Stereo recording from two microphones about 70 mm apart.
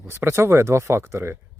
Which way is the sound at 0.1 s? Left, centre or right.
Right.